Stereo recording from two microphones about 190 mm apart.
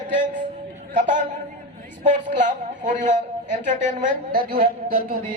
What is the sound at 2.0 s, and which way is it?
A man's voice, 40° right (ahead or behind).